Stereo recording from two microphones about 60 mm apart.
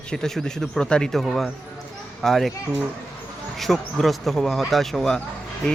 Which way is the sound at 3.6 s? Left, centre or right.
Centre.